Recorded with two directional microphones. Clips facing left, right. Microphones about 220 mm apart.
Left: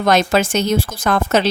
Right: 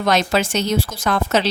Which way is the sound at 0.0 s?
50° left (ahead or behind).